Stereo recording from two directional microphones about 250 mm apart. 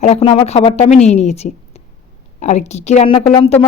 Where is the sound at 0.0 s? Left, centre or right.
Left.